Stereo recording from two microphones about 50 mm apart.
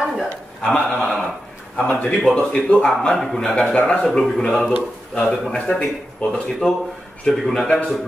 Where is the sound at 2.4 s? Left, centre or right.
Centre.